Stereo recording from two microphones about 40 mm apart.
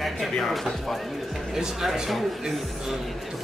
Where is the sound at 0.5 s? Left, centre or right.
Centre.